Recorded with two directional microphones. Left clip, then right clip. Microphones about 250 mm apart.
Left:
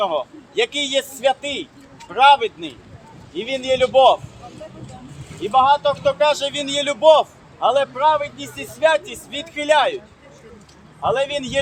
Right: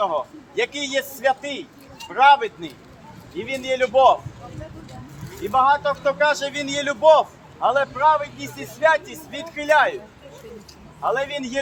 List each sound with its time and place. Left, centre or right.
0.0 s a man's voice: centre
5.5 s speech: centre
11.0 s speech: centre